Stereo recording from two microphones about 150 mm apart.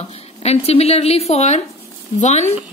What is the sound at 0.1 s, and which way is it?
A woman's voice, 45° left (ahead or behind).